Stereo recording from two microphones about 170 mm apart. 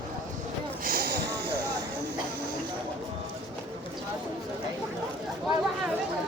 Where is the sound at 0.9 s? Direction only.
65° right (ahead or behind).